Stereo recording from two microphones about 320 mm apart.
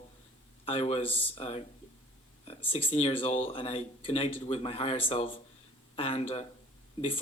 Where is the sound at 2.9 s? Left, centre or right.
Centre.